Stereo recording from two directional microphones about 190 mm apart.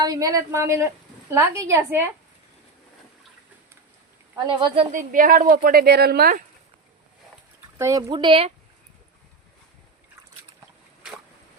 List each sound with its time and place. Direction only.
0.0 s speech: 20° right (ahead or behind)
4.4 s speech: 30° right (ahead or behind)
4.9 s a woman's voice: 45° right (ahead or behind)
7.8 s speech: 15° right (ahead or behind)